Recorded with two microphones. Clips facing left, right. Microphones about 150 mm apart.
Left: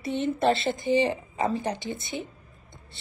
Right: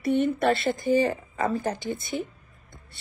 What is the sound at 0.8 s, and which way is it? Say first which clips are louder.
Speech: right 1 dB; 45° right (ahead or behind).